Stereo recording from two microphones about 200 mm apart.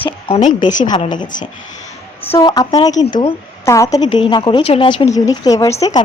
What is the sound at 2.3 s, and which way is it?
A woman's voice, 20° left (ahead or behind).